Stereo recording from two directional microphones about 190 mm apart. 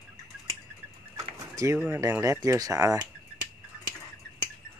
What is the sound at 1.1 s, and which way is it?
Bird, 15° right (ahead or behind).